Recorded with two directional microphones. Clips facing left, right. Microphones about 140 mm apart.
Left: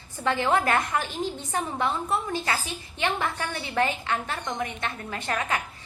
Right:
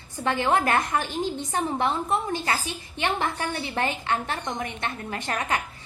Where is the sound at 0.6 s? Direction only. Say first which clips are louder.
Right 1 dB; 40° right (ahead or behind).